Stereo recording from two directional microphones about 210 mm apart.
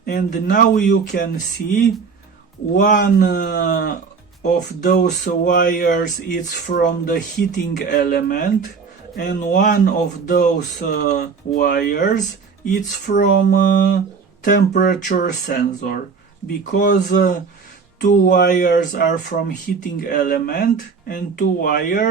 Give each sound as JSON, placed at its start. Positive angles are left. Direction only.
{"t": 0.0, "sound": "speech", "side_deg": 40}
{"t": 2.7, "sound": "speech", "side_deg": 40}